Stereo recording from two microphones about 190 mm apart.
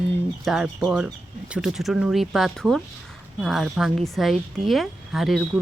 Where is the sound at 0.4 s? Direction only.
Centre (ahead or behind).